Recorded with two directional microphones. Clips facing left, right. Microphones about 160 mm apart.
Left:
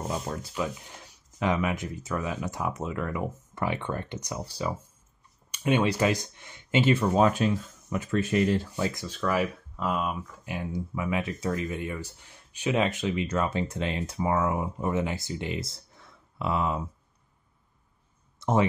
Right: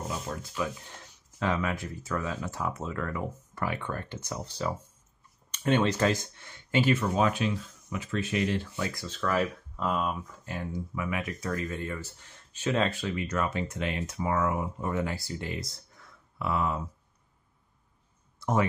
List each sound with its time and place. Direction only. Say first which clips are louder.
0.6 s speech: even; 15° left (ahead or behind); by 8.6 s 40° left (ahead or behind)
8.7 s speech: left 4 dB; 25° left (ahead or behind)
9.0 s speech: right 1 dB; 10° left (ahead or behind)
11.0 s speech: left 4 dB; 25° left (ahead or behind)
18.4 s speech: left 3 dB; 25° left (ahead or behind)